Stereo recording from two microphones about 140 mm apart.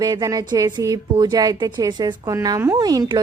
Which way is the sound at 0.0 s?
25° right (ahead or behind).